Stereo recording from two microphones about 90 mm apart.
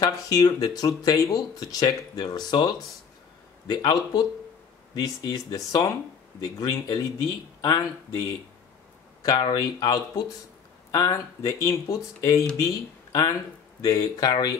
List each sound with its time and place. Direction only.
0.0 s speech: 45° left (ahead or behind)